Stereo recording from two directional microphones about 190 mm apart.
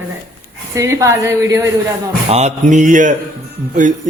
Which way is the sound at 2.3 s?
40° right (ahead or behind).